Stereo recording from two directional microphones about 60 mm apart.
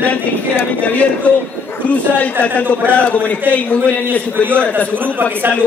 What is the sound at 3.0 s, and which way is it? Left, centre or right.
Speech, left.